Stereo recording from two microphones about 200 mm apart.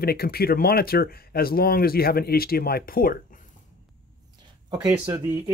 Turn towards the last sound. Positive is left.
turn(degrees=-15)  # may be behind; listen again after turning